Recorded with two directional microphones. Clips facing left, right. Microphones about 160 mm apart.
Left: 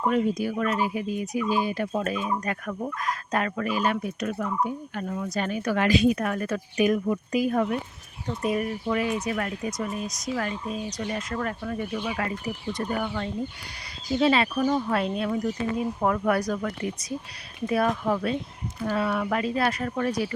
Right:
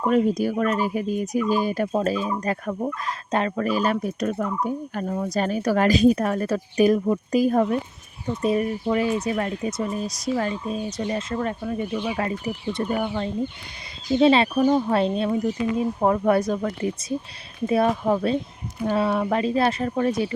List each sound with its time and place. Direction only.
0.0 s speech: 40° right (ahead or behind); by 20.3 s 25° right (ahead or behind)